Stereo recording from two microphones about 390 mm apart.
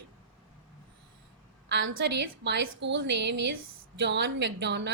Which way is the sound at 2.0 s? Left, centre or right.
Right.